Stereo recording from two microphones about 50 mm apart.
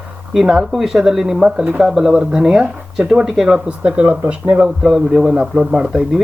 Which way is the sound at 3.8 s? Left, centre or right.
Right.